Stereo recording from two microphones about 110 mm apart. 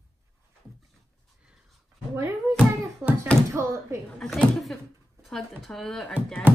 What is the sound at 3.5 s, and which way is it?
Speech, 25° right (ahead or behind).